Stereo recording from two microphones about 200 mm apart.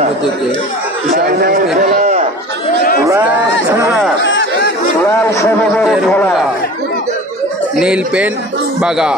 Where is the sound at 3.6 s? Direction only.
10° right (ahead or behind).